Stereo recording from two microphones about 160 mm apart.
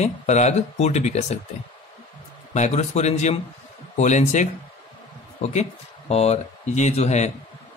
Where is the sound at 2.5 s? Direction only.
45° left (ahead or behind).